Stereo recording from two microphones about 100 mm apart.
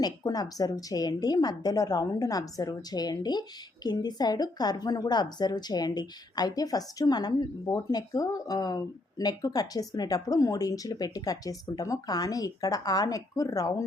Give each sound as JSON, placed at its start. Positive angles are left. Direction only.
{"t": 0.3, "sound": "a woman's voice", "side_deg": 40}